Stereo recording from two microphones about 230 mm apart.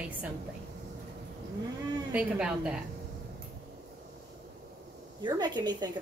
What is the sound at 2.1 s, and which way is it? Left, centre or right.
Speech, centre.